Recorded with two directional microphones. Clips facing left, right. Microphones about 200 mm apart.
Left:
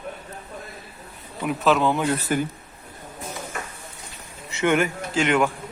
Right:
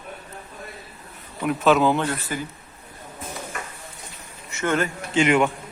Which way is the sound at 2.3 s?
55° left (ahead or behind).